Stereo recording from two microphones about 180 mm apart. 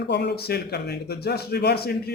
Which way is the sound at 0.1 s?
70° left (ahead or behind).